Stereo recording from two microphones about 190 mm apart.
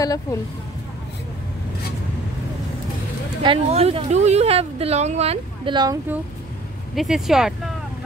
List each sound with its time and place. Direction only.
0.0 s speech: 20° left (ahead or behind)
3.4 s speech: 35° right (ahead or behind)
7.0 s speech: centre (ahead or behind)